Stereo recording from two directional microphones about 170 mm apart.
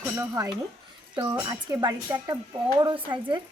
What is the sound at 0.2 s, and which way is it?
Speech, 20° right (ahead or behind).